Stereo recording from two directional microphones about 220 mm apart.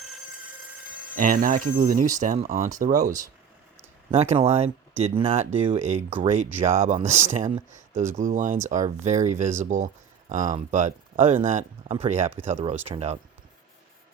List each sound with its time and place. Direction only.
1.1 s speech: 40° right (ahead or behind)
2.9 s speech: 15° right (ahead or behind)
4.1 s speech: 30° right (ahead or behind)